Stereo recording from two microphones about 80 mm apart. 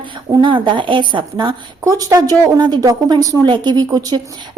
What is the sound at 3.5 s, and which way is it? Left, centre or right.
Speech, right.